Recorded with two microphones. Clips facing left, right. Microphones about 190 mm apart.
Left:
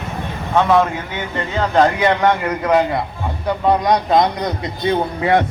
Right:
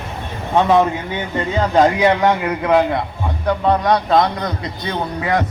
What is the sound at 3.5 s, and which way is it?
A man's voice, 10° left (ahead or behind).